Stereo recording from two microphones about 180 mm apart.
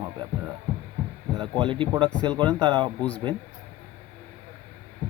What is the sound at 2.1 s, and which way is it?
Speech, 5° left (ahead or behind).